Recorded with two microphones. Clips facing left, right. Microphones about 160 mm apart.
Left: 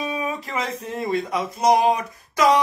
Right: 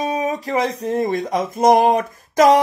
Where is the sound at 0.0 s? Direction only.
40° right (ahead or behind).